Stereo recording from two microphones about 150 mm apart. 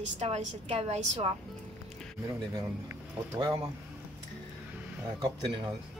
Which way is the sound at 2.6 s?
20° right (ahead or behind).